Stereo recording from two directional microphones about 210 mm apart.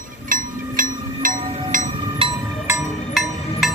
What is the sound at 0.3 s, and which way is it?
Music, 40° right (ahead or behind).